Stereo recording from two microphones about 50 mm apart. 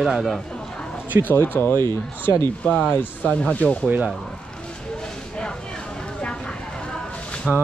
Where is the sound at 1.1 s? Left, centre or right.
Right.